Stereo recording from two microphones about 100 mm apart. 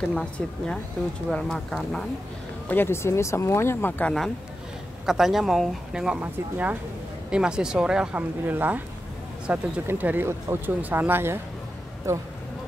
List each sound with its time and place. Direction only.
0.1 s speech: 5° left (ahead or behind)
2.7 s speech: 25° left (ahead or behind)
4.0 s speech: 5° left (ahead or behind)
6.2 s speech: 20° right (ahead or behind)
7.2 s speech: 10° right (ahead or behind); by 12.2 s 30° right (ahead or behind)